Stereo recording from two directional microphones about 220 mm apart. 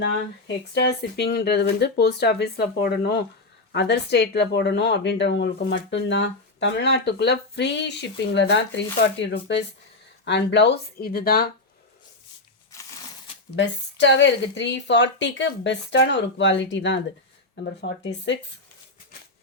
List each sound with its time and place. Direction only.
0.0 s a woman's voice: 50° left (ahead or behind)
13.6 s a woman's voice: 55° left (ahead or behind)